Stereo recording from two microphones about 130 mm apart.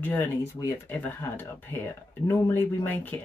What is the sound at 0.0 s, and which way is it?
Speech, 15° left (ahead or behind).